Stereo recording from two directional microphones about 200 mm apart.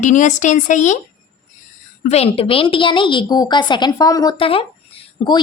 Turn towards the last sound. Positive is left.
turn(degrees=25)  # may be behind; listen again after turning